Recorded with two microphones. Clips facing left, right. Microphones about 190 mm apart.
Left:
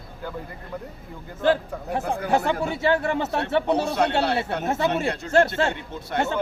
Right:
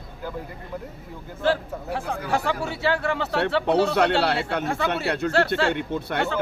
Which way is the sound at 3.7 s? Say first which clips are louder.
Right 2 dB; 65° right (ahead or behind).